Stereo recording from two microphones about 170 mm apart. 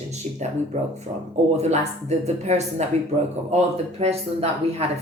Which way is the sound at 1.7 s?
40° right (ahead or behind).